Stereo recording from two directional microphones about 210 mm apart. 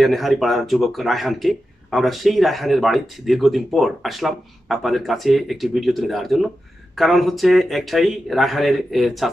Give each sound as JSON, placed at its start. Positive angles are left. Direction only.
{"t": 0.0, "sound": "speech", "side_deg": 0}